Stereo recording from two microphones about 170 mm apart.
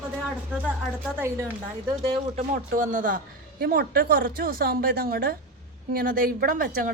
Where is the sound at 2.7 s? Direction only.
50° right (ahead or behind).